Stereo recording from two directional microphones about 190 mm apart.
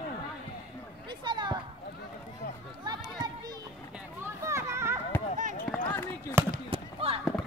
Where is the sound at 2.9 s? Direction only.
20° right (ahead or behind).